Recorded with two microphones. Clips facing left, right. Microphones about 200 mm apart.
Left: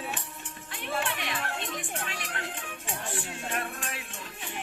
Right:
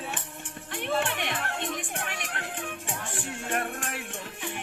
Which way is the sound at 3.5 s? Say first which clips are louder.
Right 5 dB; 55° right (ahead or behind).